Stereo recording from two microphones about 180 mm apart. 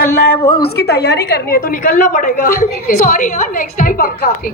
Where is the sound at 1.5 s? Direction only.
50° left (ahead or behind).